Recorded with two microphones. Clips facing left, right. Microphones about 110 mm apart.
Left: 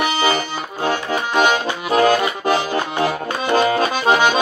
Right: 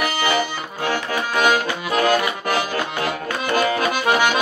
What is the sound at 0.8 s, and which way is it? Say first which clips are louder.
Accordion: left 2 dB; 25° left (ahead or behind).